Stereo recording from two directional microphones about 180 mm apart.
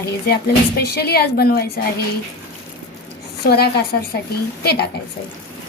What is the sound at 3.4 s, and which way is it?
Speech, 60° left (ahead or behind).